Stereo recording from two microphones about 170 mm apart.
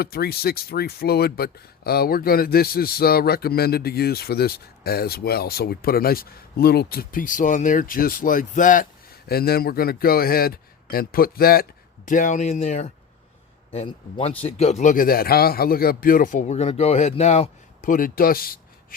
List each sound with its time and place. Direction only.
0.0 s speech: 65° left (ahead or behind)
12.0 s a man's voice: 50° left (ahead or behind)